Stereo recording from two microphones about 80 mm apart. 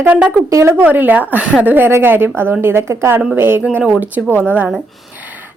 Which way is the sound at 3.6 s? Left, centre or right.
Centre.